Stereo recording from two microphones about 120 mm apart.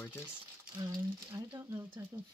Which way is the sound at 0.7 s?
35° right (ahead or behind).